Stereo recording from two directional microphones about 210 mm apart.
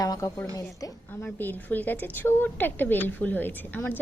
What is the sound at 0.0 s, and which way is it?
A woman's voice, 15° left (ahead or behind).